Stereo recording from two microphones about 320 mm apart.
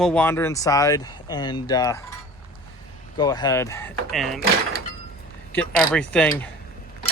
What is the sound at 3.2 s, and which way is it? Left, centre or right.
Speech, centre.